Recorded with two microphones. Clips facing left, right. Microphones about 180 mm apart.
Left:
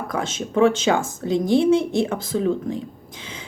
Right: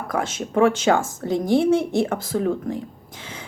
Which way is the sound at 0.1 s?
20° left (ahead or behind).